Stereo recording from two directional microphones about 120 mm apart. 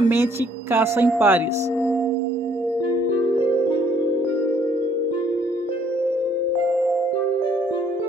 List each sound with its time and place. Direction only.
0.7 s speech: 20° right (ahead or behind)